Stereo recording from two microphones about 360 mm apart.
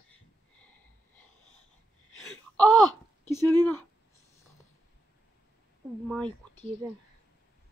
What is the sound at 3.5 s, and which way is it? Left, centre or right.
Speech, centre.